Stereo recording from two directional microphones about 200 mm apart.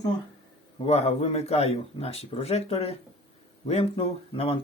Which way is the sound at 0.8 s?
30° left (ahead or behind).